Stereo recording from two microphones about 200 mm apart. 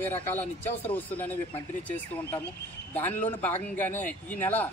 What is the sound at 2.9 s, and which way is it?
Speech, 10° left (ahead or behind).